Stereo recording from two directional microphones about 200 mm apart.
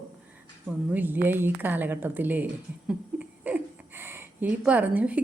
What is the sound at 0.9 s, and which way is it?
Speech, 10° right (ahead or behind).